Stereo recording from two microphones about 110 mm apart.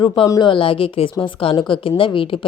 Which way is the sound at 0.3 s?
50° left (ahead or behind).